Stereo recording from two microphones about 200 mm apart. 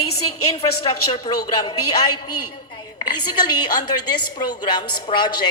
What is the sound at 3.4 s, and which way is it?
A woman's voice, 20° left (ahead or behind).